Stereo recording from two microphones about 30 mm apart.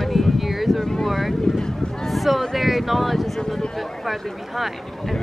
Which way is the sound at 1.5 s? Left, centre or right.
Centre.